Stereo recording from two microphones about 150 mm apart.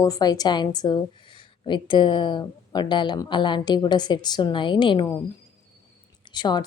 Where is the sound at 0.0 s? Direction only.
25° left (ahead or behind).